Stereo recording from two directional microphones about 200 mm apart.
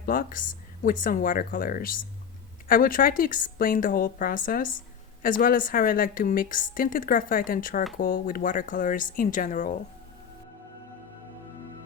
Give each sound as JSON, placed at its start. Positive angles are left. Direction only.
{"t": 0.0, "sound": "a woman's voice", "side_deg": 45}